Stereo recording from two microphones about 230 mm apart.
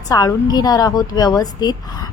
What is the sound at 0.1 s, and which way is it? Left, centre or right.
A woman's voice, centre.